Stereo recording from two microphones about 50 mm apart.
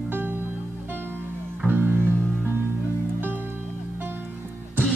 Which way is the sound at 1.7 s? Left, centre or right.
Right.